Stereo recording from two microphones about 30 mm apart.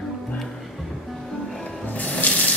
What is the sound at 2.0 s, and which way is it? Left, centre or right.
Sink, left.